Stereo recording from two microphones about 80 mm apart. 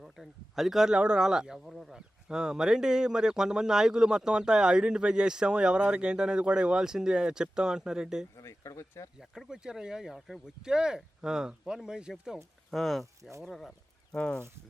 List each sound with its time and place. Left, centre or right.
0.0 s a man's voice: centre
8.4 s speech: left
9.1 s a man's voice: centre
12.7 s speech: centre